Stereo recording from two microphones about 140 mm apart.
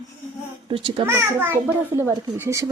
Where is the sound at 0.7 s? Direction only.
40° right (ahead or behind).